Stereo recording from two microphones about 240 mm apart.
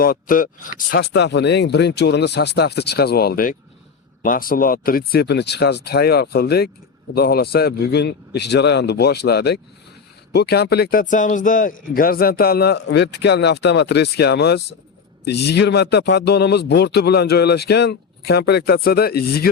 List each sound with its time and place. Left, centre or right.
0.0 s speech: left